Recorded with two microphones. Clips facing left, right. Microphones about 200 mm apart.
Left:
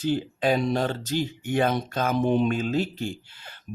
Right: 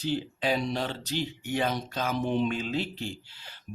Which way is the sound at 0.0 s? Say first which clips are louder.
Left 5 dB; 50° left (ahead or behind).